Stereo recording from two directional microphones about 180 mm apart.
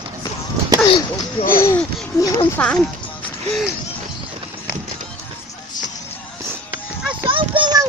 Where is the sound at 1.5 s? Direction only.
15° left (ahead or behind).